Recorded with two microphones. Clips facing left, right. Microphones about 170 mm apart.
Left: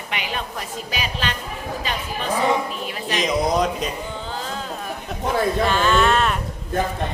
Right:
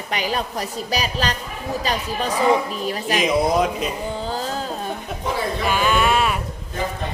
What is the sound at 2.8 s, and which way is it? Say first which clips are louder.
Speech: right 4 dB; 40° right (ahead or behind).